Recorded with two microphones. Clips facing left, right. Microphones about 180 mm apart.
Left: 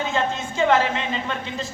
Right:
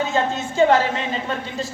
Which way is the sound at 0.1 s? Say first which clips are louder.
Right 2 dB; 40° right (ahead or behind).